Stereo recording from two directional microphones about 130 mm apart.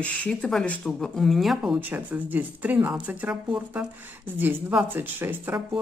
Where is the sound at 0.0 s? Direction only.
10° left (ahead or behind).